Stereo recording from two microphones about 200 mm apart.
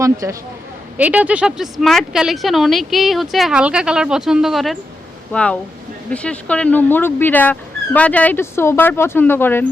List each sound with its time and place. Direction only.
0.0 s speech: 15° right (ahead or behind); by 9.6 s 10° left (ahead or behind)